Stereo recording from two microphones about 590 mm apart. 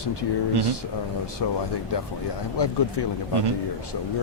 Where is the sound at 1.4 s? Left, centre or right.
Left.